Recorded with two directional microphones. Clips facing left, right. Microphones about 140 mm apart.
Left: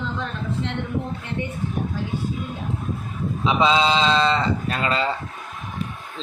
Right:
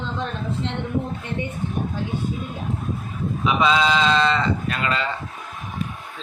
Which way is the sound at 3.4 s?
25° left (ahead or behind).